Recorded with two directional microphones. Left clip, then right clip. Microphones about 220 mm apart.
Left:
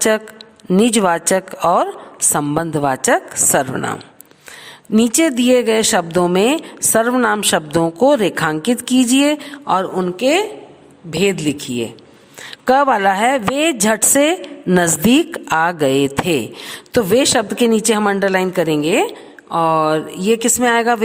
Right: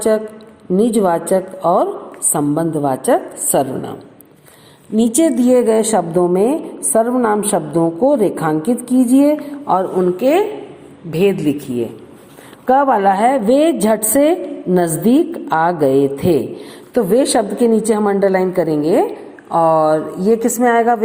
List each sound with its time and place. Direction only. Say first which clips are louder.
0.7 s a woman's voice: even; 90° left
4.9 s speech: right 1 dB; 90° left
8.2 s a woman's voice: right 1 dB; 55° left (ahead or behind)
9.2 s a woman's voice: right 2 dB; 70° left (ahead or behind)
12.6 s a woman's voice: right 1 dB; 65° left (ahead or behind)
19.5 s speech: right 2 dB; 40° left (ahead or behind)
20.2 s a woman's voice: right 1 dB; 65° left (ahead or behind)